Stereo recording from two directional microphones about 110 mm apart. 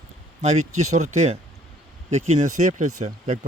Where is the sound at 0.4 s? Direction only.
90° right.